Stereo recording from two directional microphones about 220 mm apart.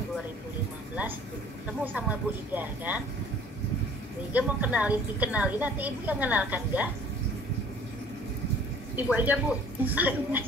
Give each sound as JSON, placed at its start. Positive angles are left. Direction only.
{"t": 1.7, "sound": "a woman's voice", "side_deg": -5}
{"t": 4.3, "sound": "a woman's voice", "side_deg": -5}
{"t": 8.9, "sound": "a woman's voice", "side_deg": -5}